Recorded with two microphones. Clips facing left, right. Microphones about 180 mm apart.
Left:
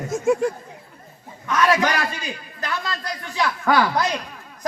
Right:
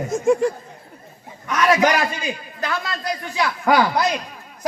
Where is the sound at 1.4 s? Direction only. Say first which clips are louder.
Right 2 dB; 20° right (ahead or behind).